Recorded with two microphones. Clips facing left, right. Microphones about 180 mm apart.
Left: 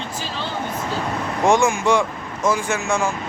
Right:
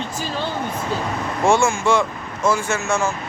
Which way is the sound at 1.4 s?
15° left (ahead or behind).